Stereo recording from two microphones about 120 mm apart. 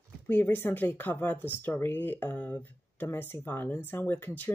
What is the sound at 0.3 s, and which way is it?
Speech, 15° left (ahead or behind).